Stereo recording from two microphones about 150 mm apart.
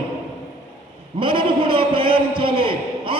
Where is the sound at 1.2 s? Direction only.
35° right (ahead or behind).